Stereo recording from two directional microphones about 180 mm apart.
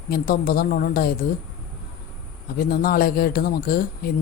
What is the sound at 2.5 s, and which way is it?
Speech, 55° left (ahead or behind).